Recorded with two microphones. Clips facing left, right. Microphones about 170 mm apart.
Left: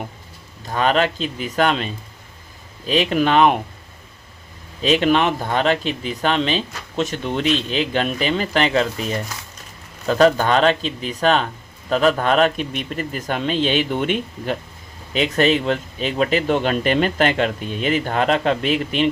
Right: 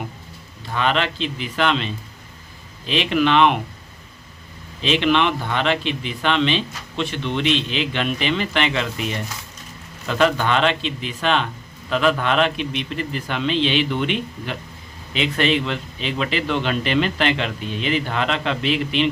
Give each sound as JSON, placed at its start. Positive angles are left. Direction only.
{"t": 0.7, "sound": "a man's voice", "side_deg": 40}
{"t": 4.8, "sound": "a man's voice", "side_deg": 45}